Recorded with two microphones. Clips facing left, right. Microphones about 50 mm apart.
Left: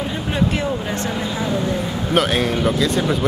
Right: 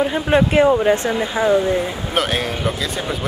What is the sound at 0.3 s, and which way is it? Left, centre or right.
Speech, right.